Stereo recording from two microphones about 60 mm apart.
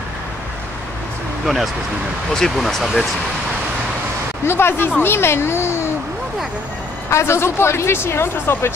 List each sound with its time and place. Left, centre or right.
1.4 s speech: centre
2.3 s speech: centre
4.5 s speech: left
7.1 s speech: left